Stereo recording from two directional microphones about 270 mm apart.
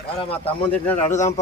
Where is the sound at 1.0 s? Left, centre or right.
Left.